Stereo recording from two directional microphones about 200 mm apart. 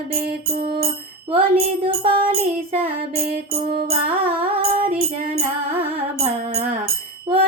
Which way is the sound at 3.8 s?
30° right (ahead or behind).